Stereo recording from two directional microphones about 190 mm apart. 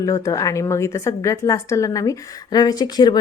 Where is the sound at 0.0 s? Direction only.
20° left (ahead or behind).